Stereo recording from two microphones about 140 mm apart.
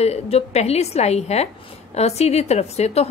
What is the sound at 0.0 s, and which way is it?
A woman's voice, 50° left (ahead or behind).